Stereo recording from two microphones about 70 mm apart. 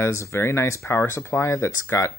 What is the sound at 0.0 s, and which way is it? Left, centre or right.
Speech, left.